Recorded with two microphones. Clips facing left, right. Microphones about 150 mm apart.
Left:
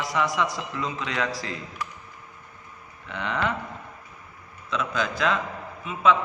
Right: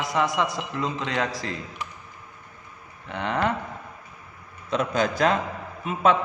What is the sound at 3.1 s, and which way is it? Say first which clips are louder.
Speech: right 3 dB; 40° right (ahead or behind).